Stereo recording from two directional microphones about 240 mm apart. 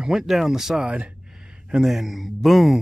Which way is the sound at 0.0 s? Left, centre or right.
Centre.